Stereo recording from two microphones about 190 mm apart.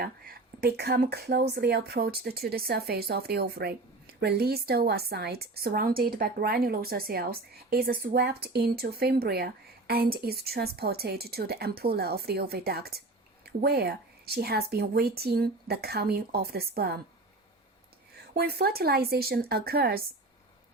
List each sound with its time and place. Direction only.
0.0 s speech: 55° right (ahead or behind)
18.3 s speech: 55° right (ahead or behind)